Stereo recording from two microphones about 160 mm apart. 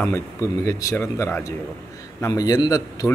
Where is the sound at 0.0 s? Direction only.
15° left (ahead or behind).